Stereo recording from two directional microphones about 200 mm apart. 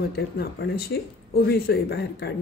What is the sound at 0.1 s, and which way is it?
Speech, 55° left (ahead or behind).